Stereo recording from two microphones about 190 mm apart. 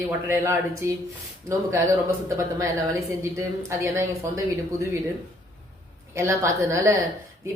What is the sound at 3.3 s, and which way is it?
A woman's voice, 15° right (ahead or behind).